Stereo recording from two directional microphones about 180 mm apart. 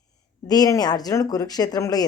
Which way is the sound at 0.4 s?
20° left (ahead or behind).